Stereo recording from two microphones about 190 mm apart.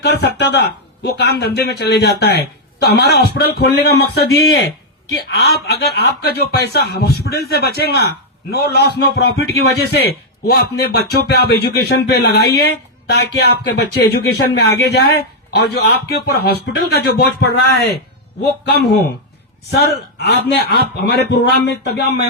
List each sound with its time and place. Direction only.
0.0 s a man's voice: 60° left (ahead or behind)